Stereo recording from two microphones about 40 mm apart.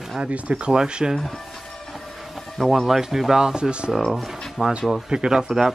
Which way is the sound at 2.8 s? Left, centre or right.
Centre.